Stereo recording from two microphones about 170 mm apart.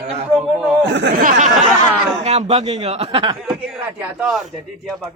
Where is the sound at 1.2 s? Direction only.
50° right (ahead or behind).